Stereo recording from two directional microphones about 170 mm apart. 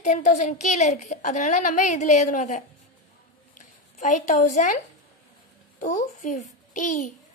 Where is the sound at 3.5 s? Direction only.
45° left (ahead or behind).